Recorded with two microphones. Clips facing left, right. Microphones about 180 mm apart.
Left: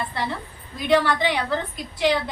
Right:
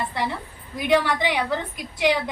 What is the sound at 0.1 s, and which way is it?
A woman's voice, 15° right (ahead or behind).